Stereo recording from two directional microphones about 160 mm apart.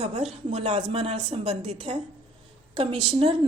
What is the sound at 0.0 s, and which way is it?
Speech, 40° right (ahead or behind).